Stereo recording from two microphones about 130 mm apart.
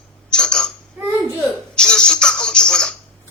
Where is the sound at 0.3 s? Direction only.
5° left (ahead or behind).